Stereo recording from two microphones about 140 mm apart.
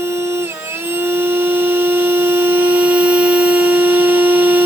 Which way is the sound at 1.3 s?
15° right (ahead or behind).